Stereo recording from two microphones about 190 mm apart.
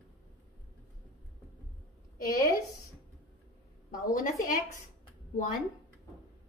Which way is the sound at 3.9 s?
45° left (ahead or behind).